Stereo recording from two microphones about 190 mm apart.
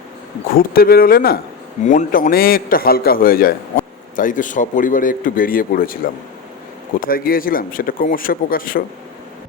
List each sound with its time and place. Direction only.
0.5 s a man's voice: 50° left (ahead or behind)
7.1 s a man's voice: 50° left (ahead or behind)